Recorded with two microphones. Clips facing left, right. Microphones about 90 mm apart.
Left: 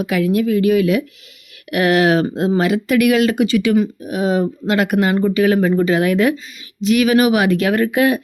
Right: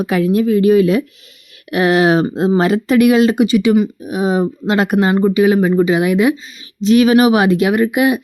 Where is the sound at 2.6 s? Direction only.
30° right (ahead or behind).